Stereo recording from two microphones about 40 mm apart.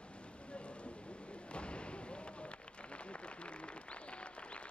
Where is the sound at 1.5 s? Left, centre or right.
Left.